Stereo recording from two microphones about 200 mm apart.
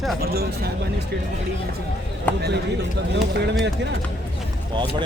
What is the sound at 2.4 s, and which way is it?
Speech, 60° right (ahead or behind).